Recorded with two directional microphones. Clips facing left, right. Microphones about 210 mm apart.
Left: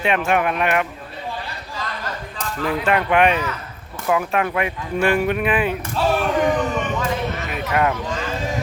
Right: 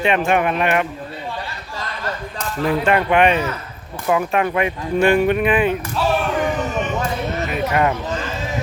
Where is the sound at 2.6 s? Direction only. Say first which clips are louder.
Right 4 dB; 35° right (ahead or behind).